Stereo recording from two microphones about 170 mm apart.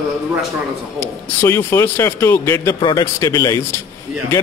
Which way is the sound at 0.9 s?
15° left (ahead or behind).